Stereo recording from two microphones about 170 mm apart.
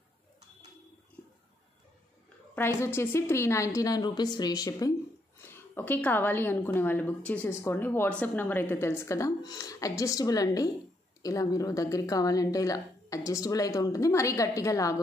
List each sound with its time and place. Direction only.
2.5 s a woman's voice: 15° left (ahead or behind)